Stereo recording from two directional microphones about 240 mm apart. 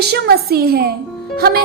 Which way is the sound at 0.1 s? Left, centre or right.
Right.